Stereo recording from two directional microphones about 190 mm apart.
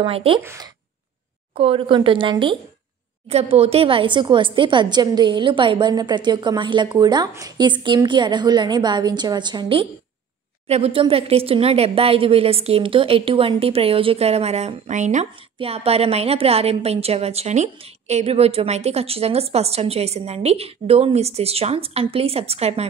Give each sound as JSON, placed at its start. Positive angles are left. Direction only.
{"t": 0.0, "sound": "a woman's voice", "side_deg": -30}
{"t": 0.4, "sound": "speech", "side_deg": -15}
{"t": 1.6, "sound": "a woman's voice", "side_deg": -30}